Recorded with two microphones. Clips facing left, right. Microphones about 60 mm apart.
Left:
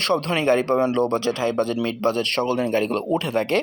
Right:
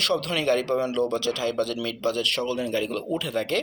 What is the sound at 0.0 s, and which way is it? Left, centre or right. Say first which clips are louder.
Speech: left 4 dB; left.